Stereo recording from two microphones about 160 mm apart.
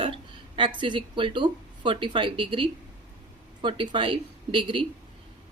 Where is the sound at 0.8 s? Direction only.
30° right (ahead or behind).